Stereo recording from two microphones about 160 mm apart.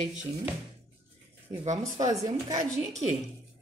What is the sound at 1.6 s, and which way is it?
Speech, 45° right (ahead or behind).